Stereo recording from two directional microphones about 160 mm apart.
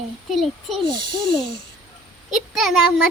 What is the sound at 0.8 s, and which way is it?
Speech, 30° right (ahead or behind).